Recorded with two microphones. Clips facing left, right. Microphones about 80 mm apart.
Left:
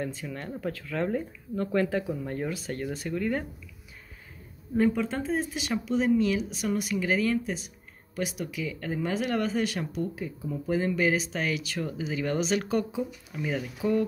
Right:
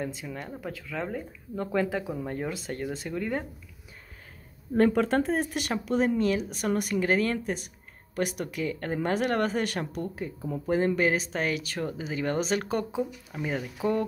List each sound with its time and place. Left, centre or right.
0.0 s speech: centre
1.5 s speech: centre
4.7 s speech: right